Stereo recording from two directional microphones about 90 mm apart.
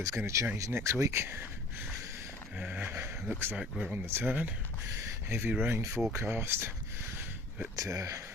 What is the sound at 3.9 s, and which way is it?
Speech, 25° right (ahead or behind).